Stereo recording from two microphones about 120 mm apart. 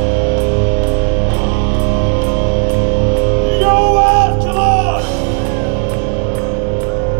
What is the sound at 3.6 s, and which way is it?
Music, 60° left (ahead or behind).